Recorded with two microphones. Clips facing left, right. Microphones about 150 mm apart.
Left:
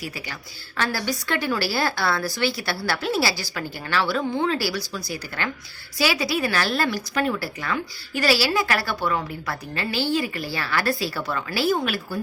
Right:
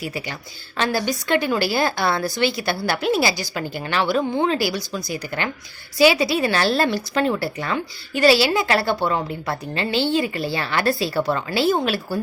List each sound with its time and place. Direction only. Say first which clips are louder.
0.0 s a woman's voice: right 5 dB; 20° right (ahead or behind)